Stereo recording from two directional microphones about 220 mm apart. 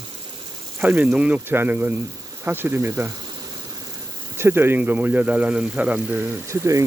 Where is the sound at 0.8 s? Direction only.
5° right (ahead or behind).